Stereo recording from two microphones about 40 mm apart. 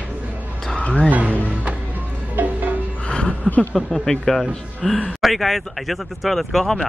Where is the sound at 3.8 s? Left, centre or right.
Centre.